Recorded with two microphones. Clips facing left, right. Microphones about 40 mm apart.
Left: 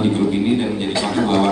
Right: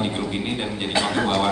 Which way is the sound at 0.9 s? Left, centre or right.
Right.